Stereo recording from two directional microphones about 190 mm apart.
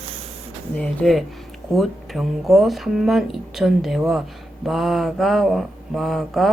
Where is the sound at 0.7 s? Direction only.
Centre (ahead or behind).